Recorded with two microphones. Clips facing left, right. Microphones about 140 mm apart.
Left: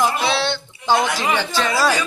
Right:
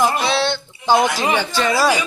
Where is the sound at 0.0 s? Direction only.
Centre (ahead or behind).